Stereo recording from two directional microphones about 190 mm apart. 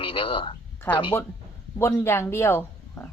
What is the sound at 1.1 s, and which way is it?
Speech, 10° left (ahead or behind).